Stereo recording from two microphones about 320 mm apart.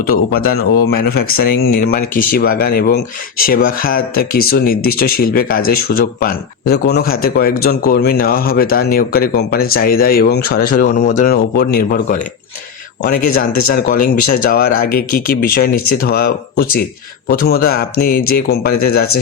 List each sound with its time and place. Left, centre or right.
0.1 s speech: left